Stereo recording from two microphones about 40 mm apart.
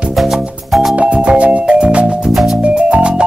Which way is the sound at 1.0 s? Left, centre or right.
Right.